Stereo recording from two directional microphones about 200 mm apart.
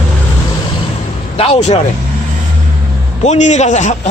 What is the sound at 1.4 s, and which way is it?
Speech, 30° left (ahead or behind).